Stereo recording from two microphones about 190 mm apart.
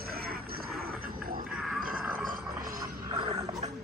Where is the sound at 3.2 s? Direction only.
25° right (ahead or behind).